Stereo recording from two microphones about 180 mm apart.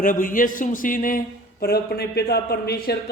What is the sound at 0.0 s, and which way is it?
A man's voice, 50° left (ahead or behind).